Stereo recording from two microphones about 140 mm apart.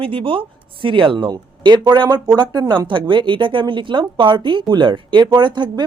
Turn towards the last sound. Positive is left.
turn(degrees=-35)  # may be behind; listen again after turning